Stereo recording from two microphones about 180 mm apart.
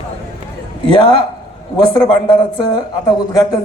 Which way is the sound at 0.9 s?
25° left (ahead or behind).